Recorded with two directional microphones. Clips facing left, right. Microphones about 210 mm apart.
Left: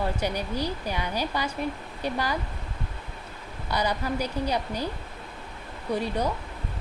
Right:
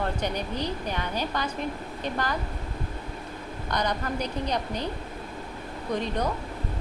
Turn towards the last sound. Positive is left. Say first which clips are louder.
# left 1 dB
turn(degrees=10)  # may be behind; listen again after turning